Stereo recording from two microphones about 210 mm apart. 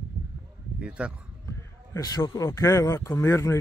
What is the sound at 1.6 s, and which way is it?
Speech, 20° left (ahead or behind).